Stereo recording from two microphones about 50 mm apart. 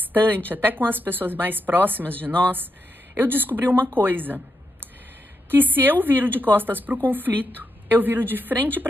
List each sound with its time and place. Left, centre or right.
0.0 s a sound: right
0.5 s a woman's voice: right
5.5 s a woman's voice: right